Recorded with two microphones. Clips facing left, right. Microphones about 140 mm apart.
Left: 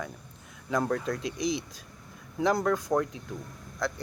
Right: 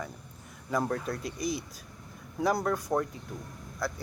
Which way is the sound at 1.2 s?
90° left.